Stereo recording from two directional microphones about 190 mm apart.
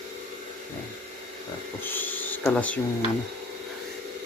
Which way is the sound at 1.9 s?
10° left (ahead or behind).